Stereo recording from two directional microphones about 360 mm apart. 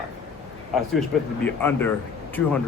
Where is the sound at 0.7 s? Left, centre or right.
Centre.